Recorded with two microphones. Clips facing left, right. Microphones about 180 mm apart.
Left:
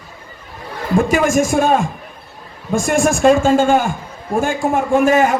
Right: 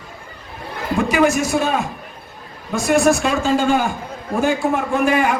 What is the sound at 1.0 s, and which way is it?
A man's voice, 50° left (ahead or behind).